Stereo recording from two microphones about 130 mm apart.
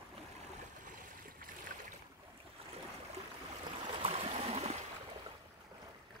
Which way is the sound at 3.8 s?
50° right (ahead or behind).